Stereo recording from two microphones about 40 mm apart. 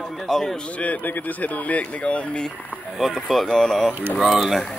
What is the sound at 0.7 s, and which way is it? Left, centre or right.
Speech, left.